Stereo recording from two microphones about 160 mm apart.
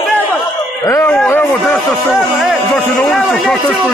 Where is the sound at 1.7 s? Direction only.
Centre (ahead or behind).